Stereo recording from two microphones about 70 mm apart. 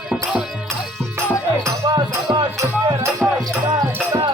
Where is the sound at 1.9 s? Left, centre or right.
Right.